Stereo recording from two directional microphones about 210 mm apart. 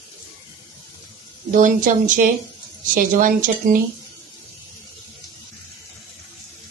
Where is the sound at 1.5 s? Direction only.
40° right (ahead or behind).